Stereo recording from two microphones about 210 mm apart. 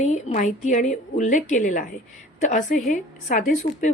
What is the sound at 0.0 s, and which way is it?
Speech, 35° left (ahead or behind).